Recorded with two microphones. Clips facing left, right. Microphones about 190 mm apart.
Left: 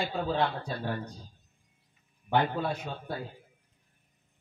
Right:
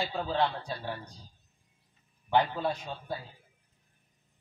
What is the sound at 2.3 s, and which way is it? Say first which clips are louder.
Speech: even; 50° left (ahead or behind).